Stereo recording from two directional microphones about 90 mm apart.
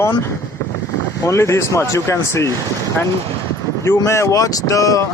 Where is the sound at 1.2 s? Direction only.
30° left (ahead or behind).